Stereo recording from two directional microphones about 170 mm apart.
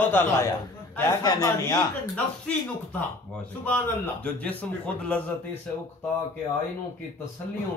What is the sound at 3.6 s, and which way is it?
Speech, 5° left (ahead or behind).